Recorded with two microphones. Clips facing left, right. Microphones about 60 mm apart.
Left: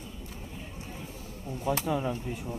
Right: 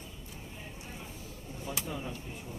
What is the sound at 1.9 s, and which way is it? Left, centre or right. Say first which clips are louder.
Speech: left 9 dB; left.